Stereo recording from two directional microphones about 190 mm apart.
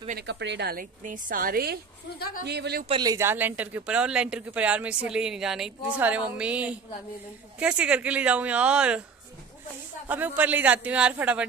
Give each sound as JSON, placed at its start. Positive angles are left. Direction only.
{"t": 0.1, "sound": "a woman's voice", "side_deg": -65}
{"t": 2.9, "sound": "speech", "side_deg": -20}
{"t": 10.0, "sound": "speech", "side_deg": -10}